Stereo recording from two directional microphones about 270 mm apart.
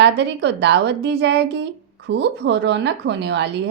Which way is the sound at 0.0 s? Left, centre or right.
Right.